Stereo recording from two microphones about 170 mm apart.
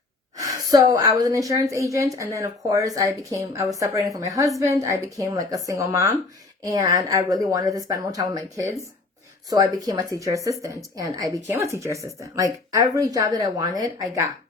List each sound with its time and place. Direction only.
0.3 s a woman's voice: 20° right (ahead or behind)